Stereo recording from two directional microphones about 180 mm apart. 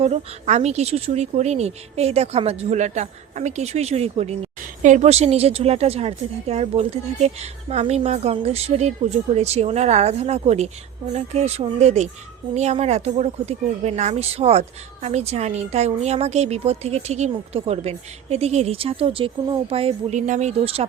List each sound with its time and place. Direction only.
0.0 s a woman's voice: 35° right (ahead or behind)